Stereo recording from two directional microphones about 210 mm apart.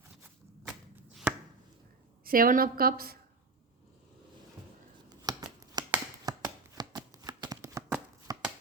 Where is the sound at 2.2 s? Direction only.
40° right (ahead or behind).